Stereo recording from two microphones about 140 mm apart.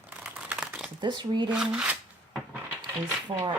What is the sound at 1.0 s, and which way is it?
Speech, 30° right (ahead or behind).